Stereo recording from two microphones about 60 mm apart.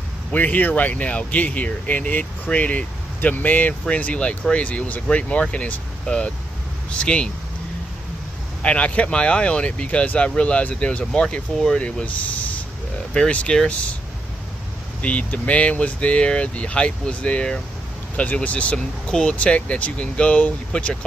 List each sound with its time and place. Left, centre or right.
0.3 s speech: left
8.6 s speech: centre
13.1 s speech: centre
15.0 s speech: left